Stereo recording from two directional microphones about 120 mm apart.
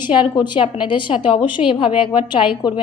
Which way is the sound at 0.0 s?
40° left (ahead or behind).